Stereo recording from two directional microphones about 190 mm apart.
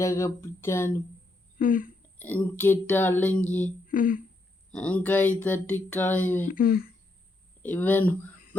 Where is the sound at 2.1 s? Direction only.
10° left (ahead or behind).